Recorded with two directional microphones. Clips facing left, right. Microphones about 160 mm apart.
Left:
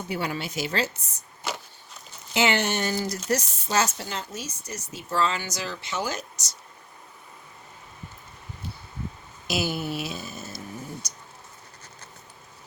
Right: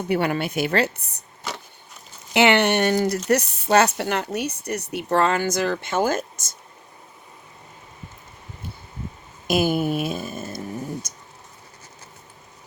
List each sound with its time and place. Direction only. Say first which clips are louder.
0.1 s speech: right 8 dB; 60° right (ahead or behind)
2.3 s speech: right 7 dB; 65° right (ahead or behind)
9.5 s a sound: right 7 dB; 50° right (ahead or behind)
11.1 s speech: right 1 dB; 50° right (ahead or behind)